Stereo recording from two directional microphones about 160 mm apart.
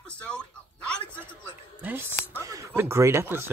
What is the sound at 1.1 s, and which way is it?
Speech, 15° right (ahead or behind).